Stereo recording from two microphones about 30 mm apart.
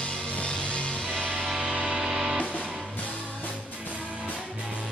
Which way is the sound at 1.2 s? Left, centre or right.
Left.